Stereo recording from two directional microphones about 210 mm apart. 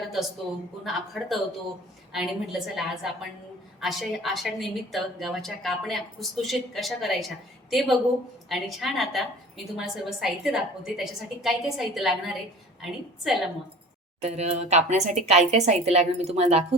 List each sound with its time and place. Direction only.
0.0 s a man's voice: centre (ahead or behind)
14.2 s speech: 30° right (ahead or behind)